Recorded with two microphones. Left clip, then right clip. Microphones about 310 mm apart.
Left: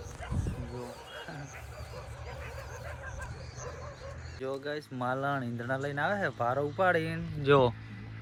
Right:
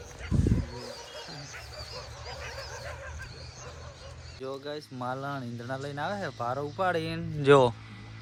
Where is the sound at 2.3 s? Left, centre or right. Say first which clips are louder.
Right 5 dB; right.